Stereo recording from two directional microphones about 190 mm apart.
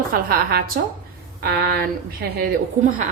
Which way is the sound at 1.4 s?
55° right (ahead or behind).